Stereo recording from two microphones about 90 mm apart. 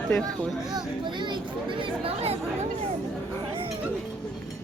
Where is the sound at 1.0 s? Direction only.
60° right (ahead or behind).